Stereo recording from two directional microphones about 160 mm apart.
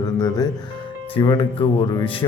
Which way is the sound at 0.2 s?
25° left (ahead or behind).